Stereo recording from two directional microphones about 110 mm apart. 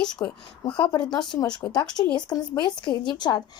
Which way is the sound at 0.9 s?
40° left (ahead or behind).